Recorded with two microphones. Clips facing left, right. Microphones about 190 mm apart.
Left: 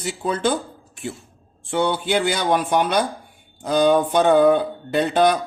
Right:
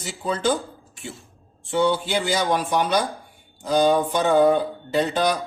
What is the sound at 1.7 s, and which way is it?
Speech, 60° left (ahead or behind).